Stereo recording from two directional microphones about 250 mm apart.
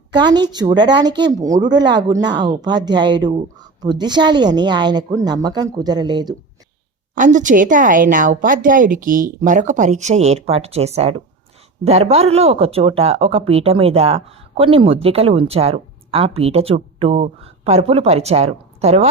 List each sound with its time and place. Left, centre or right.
0.1 s a woman's voice: centre
7.2 s a woman's voice: right